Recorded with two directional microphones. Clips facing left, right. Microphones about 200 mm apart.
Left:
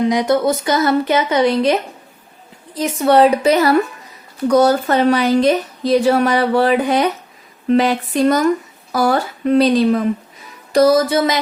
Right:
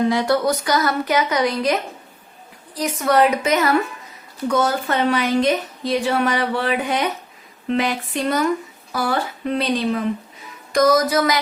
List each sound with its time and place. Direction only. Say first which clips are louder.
0.0 s speech: left 3 dB; 20° left (ahead or behind)